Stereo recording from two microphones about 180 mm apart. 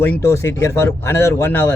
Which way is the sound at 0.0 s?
15° left (ahead or behind).